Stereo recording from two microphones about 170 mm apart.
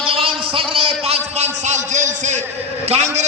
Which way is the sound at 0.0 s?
35° right (ahead or behind).